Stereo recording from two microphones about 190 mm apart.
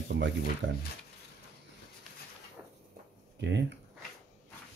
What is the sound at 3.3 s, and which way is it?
Speech, 70° right (ahead or behind).